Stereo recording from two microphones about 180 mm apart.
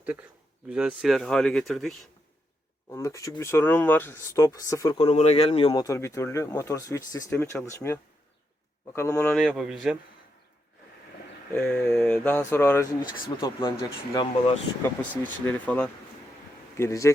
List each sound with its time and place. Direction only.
0.0 s a man's voice: 5° right (ahead or behind)
2.9 s speech: 15° left (ahead or behind)
4.9 s speech: 35° left (ahead or behind)
5.7 s speech: 20° left (ahead or behind)
9.0 s speech: 15° left (ahead or behind)
9.4 s speech: centre (ahead or behind)
11.5 s speech: 15° left (ahead or behind)
14.8 s speech: 10° left (ahead or behind)